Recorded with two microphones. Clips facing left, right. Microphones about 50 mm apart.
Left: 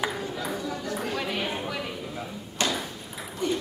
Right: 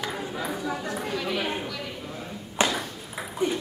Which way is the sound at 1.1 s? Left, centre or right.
Centre.